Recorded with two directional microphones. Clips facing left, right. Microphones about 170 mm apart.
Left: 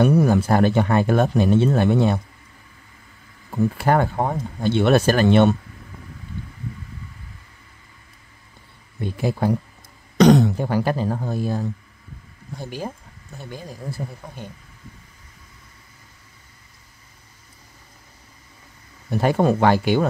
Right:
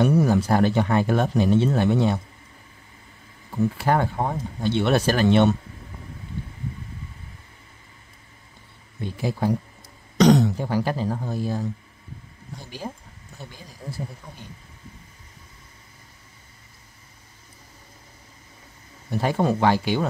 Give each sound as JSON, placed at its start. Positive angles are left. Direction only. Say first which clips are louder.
{"t": 0.0, "sound": "speech", "louder": "left 2 dB", "side_deg": 55}
{"t": 3.7, "sound": "speech", "louder": "left 5 dB", "side_deg": 55}
{"t": 9.0, "sound": "speech", "louder": "left 3 dB", "side_deg": 55}
{"t": 19.2, "sound": "speech", "louder": "left 3 dB", "side_deg": 55}